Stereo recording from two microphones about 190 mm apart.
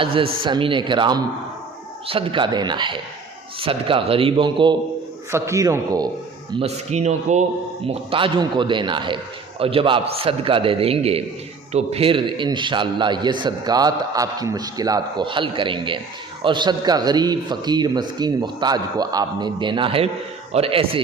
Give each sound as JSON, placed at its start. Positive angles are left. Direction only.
{"t": 0.0, "sound": "a man's voice", "side_deg": -30}
{"t": 6.6, "sound": "a man's voice", "side_deg": -35}